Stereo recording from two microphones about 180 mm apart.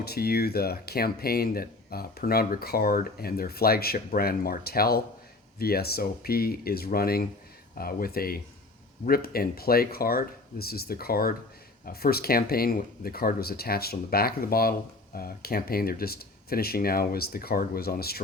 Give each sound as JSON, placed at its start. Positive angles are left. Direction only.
{"t": 0.0, "sound": "speech", "side_deg": 60}